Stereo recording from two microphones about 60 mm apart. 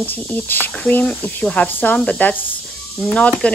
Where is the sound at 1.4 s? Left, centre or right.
Left.